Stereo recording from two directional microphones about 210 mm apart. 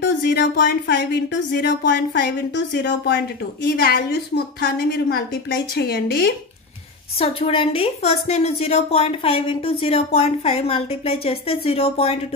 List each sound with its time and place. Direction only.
0.0 s speech: 50° left (ahead or behind)
7.2 s a woman's voice: 25° left (ahead or behind)